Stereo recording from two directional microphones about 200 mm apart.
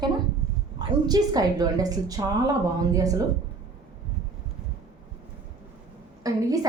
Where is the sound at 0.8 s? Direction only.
20° right (ahead or behind).